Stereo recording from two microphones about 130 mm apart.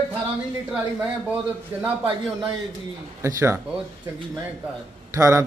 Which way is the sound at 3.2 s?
20° right (ahead or behind).